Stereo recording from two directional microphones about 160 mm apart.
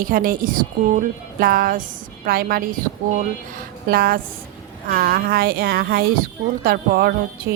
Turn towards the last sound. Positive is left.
turn(degrees=-75)  # may be behind; listen again after turning